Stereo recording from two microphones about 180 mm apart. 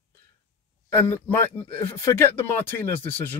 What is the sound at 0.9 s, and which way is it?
Speech, 10° left (ahead or behind).